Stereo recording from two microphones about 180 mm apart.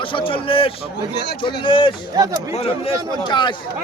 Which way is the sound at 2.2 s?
20° right (ahead or behind).